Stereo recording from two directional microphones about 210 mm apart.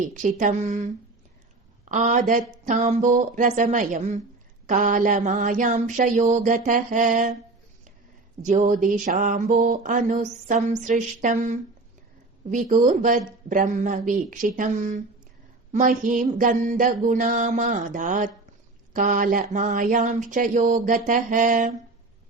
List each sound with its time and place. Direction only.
0.1 s mantra: 35° right (ahead or behind)
1.8 s a woman's voice: 35° right (ahead or behind)
2.6 s mantra: 35° right (ahead or behind)
8.4 s mantra: 35° right (ahead or behind)